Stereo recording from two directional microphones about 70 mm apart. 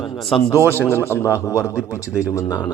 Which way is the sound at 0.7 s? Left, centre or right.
Left.